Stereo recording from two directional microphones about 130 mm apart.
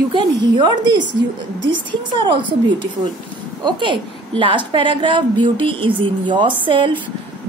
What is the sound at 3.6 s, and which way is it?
A woman's voice, 35° right (ahead or behind).